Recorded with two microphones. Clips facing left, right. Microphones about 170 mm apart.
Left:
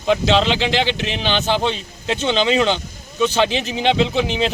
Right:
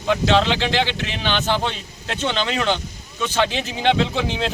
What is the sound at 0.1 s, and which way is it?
A man's voice, 15° left (ahead or behind).